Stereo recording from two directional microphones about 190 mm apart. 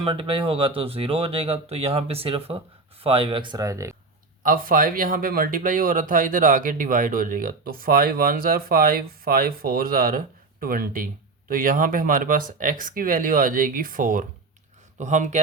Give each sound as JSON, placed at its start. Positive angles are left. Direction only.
{"t": 0.0, "sound": "speech", "side_deg": -30}
{"t": 4.4, "sound": "speech", "side_deg": -50}